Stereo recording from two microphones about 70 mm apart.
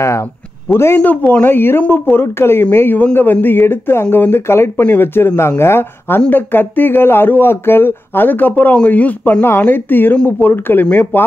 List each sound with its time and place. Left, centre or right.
0.7 s speech: left
0.9 s speech: left